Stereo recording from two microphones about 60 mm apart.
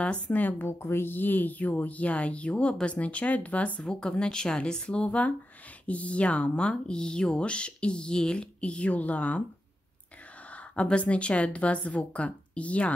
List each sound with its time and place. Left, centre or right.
0.0 s speech: left
10.5 s speech: left